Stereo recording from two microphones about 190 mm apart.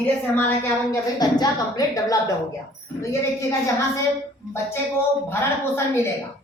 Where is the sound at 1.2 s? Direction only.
20° left (ahead or behind).